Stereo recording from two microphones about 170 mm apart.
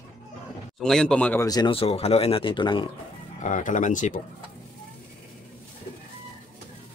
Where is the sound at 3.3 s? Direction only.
45° left (ahead or behind).